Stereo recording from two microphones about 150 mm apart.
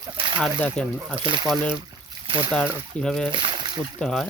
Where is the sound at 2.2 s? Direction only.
35° right (ahead or behind).